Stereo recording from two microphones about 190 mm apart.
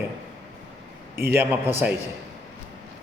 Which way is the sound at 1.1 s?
10° right (ahead or behind).